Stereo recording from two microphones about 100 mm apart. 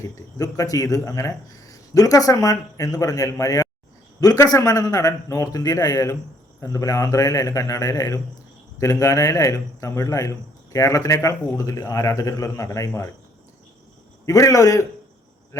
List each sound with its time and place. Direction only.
0.3 s speech: 35° left (ahead or behind)
14.3 s speech: 35° left (ahead or behind)